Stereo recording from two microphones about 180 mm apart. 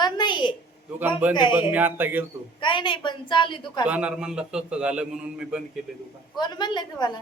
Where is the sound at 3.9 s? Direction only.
5° right (ahead or behind).